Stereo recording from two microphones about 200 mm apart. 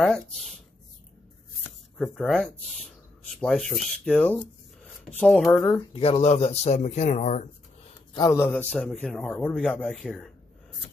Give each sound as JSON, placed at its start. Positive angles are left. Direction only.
{"t": 2.0, "sound": "speech", "side_deg": 0}
{"t": 5.6, "sound": "speech", "side_deg": 20}
{"t": 8.1, "sound": "a man's voice", "side_deg": 15}